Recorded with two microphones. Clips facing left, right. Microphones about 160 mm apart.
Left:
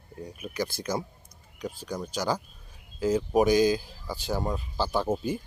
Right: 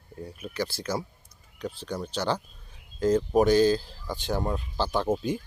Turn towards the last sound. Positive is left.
turn(degrees=10)  # may be behind; listen again after turning